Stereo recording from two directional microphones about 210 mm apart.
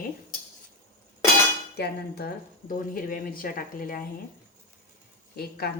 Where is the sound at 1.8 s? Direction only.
50° left (ahead or behind).